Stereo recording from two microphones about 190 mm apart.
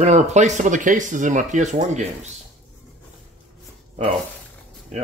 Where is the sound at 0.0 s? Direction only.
35° right (ahead or behind).